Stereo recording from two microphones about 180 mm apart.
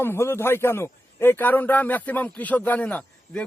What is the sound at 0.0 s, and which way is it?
A man's voice, 15° left (ahead or behind).